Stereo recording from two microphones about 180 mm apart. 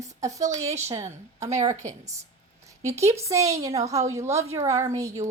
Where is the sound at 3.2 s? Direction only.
15° right (ahead or behind).